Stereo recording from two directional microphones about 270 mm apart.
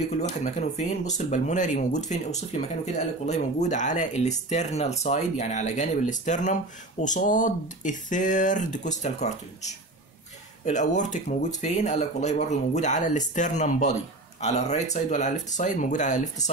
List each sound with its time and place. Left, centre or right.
0.2 s speech: left